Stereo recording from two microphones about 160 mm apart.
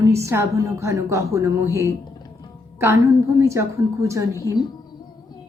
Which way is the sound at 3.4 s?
20° right (ahead or behind).